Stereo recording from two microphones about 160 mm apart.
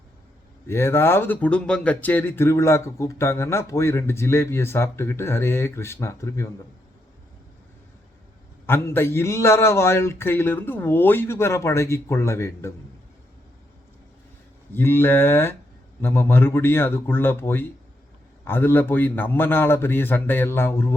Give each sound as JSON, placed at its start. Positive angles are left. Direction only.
{"t": 0.7, "sound": "speech", "side_deg": 15}
{"t": 8.6, "sound": "speech", "side_deg": 15}
{"t": 14.7, "sound": "speech", "side_deg": 15}